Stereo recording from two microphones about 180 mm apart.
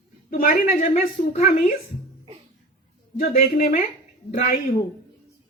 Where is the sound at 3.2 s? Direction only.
50° left (ahead or behind).